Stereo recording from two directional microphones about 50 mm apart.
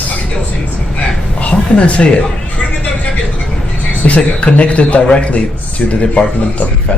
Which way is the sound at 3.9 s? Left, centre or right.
Left.